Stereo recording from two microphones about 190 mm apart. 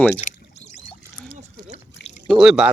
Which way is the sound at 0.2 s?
35° left (ahead or behind).